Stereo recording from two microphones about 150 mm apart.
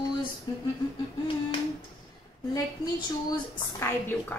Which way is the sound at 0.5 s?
30° left (ahead or behind).